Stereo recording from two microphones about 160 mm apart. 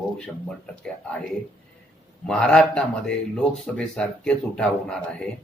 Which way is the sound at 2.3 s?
5° left (ahead or behind).